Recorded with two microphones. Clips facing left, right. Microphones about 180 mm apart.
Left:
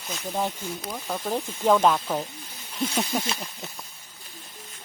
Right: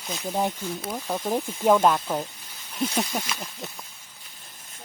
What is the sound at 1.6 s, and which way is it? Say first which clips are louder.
Speech: right 1 dB; 5° right (ahead or behind).